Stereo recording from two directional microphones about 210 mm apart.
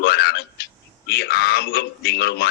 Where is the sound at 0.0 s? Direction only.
50° left (ahead or behind).